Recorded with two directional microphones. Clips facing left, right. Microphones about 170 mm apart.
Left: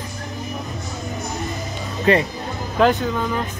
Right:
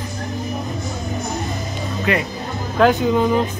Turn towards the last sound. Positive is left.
turn(degrees=-20)  # may be behind; listen again after turning